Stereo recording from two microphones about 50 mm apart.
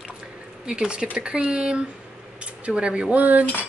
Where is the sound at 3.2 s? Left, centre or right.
Right.